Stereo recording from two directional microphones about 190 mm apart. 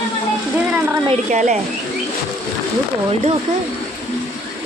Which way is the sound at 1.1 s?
40° right (ahead or behind).